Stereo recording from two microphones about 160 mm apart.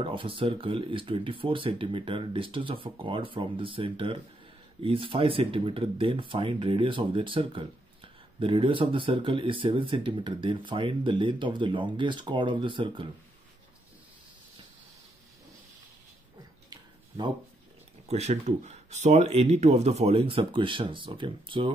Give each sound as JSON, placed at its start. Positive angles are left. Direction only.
{"t": 0.0, "sound": "speech", "side_deg": -35}
{"t": 18.0, "sound": "speech", "side_deg": -45}